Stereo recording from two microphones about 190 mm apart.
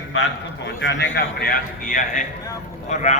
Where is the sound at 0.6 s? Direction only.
70° left (ahead or behind).